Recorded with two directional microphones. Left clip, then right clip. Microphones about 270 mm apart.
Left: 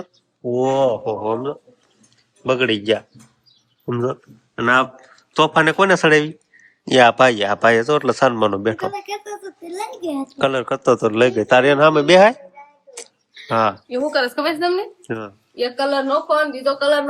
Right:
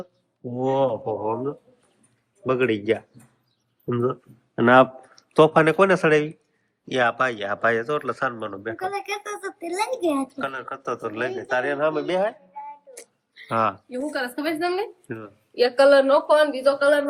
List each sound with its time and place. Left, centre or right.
0.5 s speech: centre
4.5 s speech: centre
9.0 s a child's voice: right
10.4 s speech: centre
13.5 s speech: centre
13.9 s speech: centre